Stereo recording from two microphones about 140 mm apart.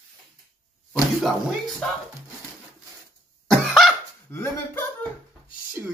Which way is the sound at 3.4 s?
Centre (ahead or behind).